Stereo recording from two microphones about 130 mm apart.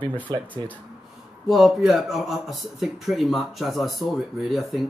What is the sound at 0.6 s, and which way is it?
Speech, 40° right (ahead or behind).